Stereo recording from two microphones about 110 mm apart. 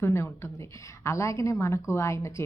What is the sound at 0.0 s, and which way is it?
A woman's voice, 25° left (ahead or behind).